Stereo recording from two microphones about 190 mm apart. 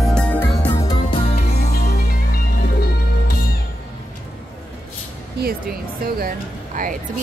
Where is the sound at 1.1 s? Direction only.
35° left (ahead or behind).